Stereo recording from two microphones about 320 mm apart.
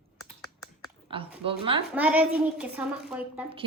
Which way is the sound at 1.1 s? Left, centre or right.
Centre.